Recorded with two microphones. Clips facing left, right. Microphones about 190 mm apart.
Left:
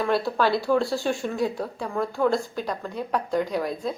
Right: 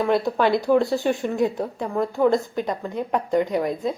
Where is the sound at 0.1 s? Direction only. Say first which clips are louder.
Right 2 dB; 20° right (ahead or behind).